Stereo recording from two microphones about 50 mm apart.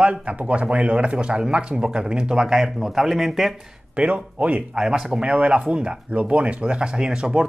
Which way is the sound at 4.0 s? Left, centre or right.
Right.